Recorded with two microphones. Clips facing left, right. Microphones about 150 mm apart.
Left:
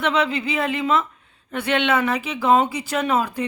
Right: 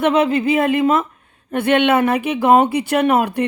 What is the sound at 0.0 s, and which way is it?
A woman's voice, 50° right (ahead or behind).